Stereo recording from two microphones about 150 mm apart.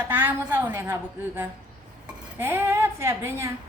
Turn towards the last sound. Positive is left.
turn(degrees=-20)  # may be behind; listen again after turning